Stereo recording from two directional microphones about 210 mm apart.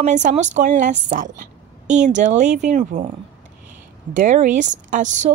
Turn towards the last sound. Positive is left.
turn(degrees=-35)  # may be behind; listen again after turning